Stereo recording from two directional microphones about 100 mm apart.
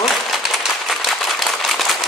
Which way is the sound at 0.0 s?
Centre (ahead or behind).